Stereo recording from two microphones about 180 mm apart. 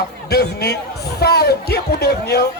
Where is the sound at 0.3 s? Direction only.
65° left (ahead or behind).